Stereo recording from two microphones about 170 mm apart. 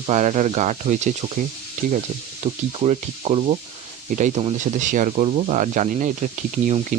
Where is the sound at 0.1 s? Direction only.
40° right (ahead or behind).